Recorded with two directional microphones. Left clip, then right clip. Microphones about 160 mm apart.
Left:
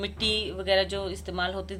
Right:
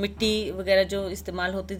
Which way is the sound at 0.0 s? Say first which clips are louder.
Right 2 dB; 50° right (ahead or behind).